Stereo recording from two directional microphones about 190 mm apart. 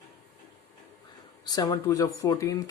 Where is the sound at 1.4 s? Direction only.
20° left (ahead or behind).